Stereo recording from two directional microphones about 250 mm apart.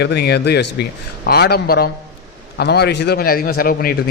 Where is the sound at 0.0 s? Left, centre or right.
Left.